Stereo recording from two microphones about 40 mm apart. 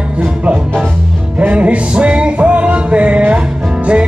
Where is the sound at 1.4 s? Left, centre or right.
Right.